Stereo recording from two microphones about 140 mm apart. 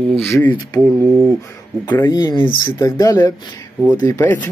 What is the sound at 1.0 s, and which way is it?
Speech, 20° right (ahead or behind).